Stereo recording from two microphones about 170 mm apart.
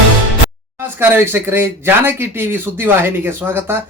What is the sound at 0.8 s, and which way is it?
Speech, 10° right (ahead or behind).